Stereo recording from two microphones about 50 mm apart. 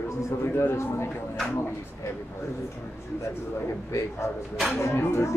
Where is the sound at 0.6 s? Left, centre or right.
Left.